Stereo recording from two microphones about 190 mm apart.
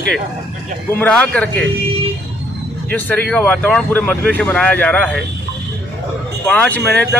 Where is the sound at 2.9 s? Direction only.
10° left (ahead or behind).